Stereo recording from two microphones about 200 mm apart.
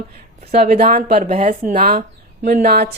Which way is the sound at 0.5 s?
35° right (ahead or behind).